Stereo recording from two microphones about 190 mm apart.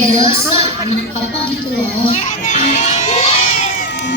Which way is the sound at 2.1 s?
35° left (ahead or behind).